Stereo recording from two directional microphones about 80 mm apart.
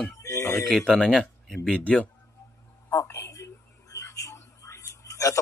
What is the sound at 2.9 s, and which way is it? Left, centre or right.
A woman's voice, left.